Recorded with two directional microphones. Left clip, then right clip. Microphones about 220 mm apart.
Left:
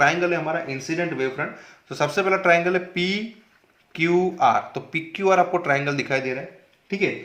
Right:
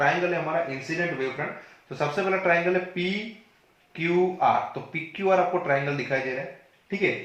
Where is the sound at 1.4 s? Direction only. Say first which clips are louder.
Left 3 dB; 50° left (ahead or behind).